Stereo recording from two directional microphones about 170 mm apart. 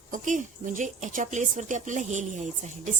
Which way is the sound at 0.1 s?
50° right (ahead or behind).